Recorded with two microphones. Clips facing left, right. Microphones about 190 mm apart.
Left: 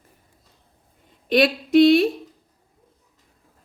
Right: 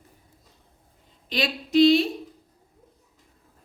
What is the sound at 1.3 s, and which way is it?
Speech, 55° left (ahead or behind).